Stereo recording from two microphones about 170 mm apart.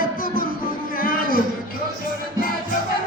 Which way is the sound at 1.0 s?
60° left (ahead or behind).